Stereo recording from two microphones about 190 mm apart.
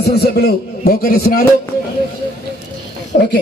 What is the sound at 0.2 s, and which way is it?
A man's voice, 55° left (ahead or behind).